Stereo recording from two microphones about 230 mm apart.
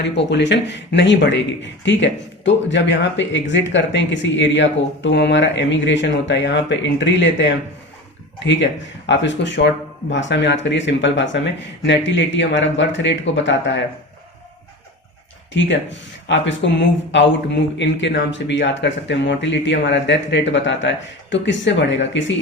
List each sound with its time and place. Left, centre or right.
0.0 s speech: left
15.5 s speech: left